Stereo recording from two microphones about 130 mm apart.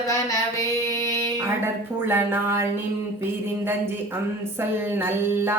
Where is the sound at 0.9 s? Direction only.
25° left (ahead or behind).